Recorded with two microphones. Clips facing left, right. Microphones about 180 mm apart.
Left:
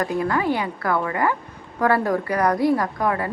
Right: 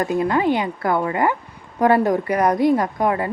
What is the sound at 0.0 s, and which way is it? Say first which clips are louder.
A woman's voice: right 3 dB; 20° right (ahead or behind).